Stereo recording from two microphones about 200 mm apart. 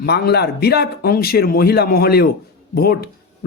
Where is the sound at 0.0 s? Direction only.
55° left (ahead or behind).